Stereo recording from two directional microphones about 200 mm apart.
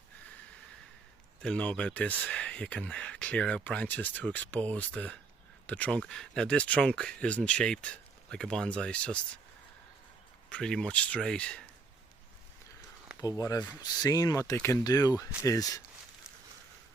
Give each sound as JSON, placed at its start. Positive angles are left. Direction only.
{"t": 1.4, "sound": "speech", "side_deg": 5}
{"t": 10.5, "sound": "speech", "side_deg": 5}
{"t": 13.1, "sound": "speech", "side_deg": 15}